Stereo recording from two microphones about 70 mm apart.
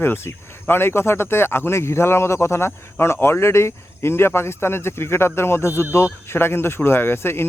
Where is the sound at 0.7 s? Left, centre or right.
Left.